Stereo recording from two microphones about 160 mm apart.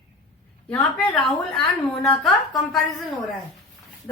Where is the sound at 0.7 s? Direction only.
10° left (ahead or behind).